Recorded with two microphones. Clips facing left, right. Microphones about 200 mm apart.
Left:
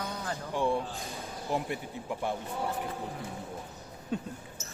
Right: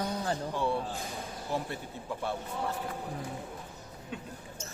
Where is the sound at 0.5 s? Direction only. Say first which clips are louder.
Left 4 dB; 15° left (ahead or behind).